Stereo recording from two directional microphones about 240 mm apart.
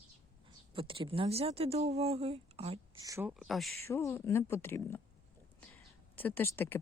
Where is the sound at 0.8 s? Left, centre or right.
Right.